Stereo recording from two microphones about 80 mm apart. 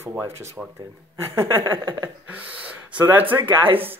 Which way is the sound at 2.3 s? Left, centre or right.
Centre.